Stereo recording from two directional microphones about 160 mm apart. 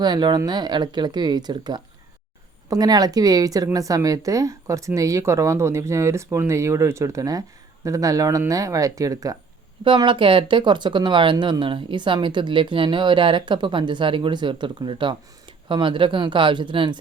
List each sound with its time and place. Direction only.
0.0 s speech: 25° right (ahead or behind)